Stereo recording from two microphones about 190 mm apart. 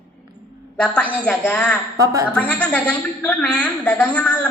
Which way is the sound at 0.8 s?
10° left (ahead or behind).